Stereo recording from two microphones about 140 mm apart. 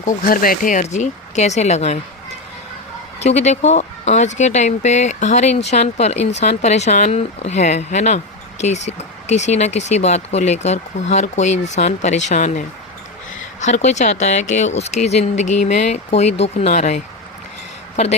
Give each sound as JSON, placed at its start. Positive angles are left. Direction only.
{"t": 0.3, "sound": "speech", "side_deg": 90}
{"t": 3.2, "sound": "speech", "side_deg": 50}